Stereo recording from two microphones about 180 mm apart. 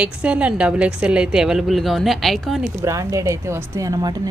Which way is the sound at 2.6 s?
20° right (ahead or behind).